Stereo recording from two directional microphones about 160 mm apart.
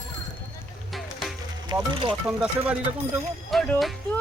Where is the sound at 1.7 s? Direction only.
30° right (ahead or behind).